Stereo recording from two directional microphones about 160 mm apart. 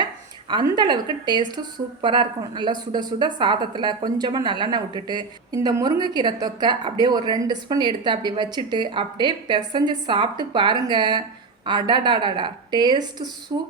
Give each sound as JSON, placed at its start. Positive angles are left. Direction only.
{"t": 0.0, "sound": "speech", "side_deg": -30}